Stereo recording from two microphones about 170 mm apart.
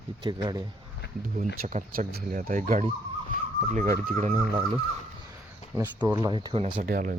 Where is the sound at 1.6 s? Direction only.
50° right (ahead or behind).